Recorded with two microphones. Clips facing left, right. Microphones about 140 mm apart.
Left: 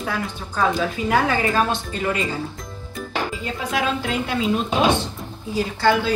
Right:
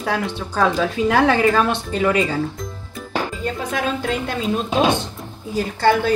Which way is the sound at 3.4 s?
45° right (ahead or behind).